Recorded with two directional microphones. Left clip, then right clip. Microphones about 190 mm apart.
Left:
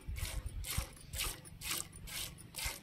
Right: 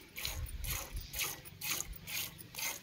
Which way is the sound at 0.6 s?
Centre (ahead or behind).